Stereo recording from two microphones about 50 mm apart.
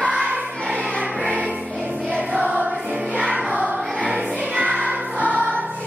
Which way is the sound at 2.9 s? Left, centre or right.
Right.